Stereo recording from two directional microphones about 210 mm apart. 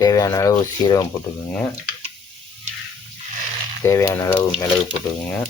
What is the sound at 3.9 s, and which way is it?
Speech, 15° left (ahead or behind).